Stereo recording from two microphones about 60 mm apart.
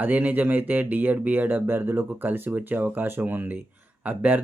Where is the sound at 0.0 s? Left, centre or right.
Right.